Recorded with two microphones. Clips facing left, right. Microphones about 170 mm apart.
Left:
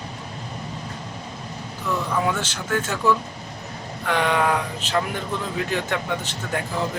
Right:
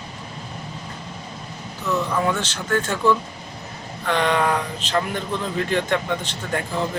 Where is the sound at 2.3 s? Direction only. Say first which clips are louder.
Right 2 dB; 10° left (ahead or behind).